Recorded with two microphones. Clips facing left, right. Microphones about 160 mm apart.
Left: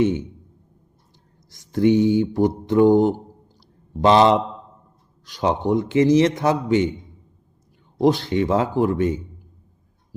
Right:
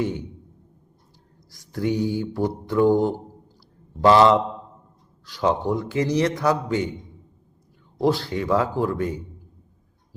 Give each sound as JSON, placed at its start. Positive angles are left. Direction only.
{"t": 0.0, "sound": "a man's voice", "side_deg": 20}
{"t": 1.5, "sound": "a man's voice", "side_deg": 20}
{"t": 7.9, "sound": "a man's voice", "side_deg": 20}